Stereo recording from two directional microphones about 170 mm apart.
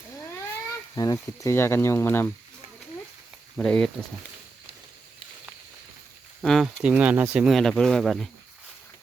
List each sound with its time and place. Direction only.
0.9 s speech: 20° left (ahead or behind)
3.6 s speech: 5° left (ahead or behind)
6.4 s speech: centre (ahead or behind)